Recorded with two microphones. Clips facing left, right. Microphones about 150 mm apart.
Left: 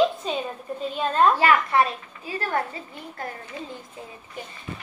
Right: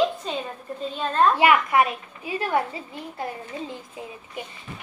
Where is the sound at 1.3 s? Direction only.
15° right (ahead or behind).